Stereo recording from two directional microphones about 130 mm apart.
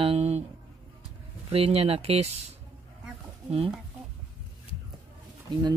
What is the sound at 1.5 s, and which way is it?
Speech, 50° right (ahead or behind).